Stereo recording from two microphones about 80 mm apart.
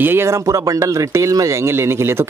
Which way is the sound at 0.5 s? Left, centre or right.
Right.